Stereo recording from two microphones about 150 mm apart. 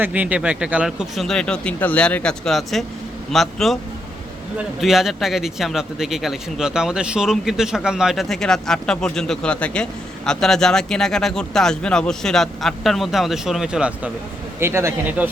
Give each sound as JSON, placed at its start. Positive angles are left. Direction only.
{"t": 0.0, "sound": "speech", "side_deg": -10}